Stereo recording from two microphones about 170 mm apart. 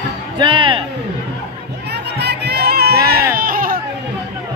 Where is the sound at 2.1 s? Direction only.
75° right (ahead or behind); by 3.8 s 55° right (ahead or behind).